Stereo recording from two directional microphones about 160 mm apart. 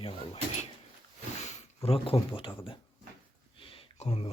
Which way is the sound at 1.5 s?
40° left (ahead or behind).